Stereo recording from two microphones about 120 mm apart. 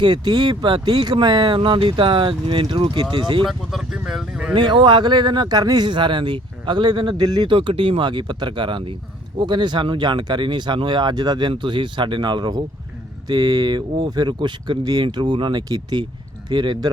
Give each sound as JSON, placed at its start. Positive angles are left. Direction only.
{"t": 0.0, "sound": "speech", "side_deg": -35}
{"t": 3.4, "sound": "speech", "side_deg": -5}
{"t": 4.5, "sound": "speech", "side_deg": -40}
{"t": 7.5, "sound": "speech", "side_deg": -45}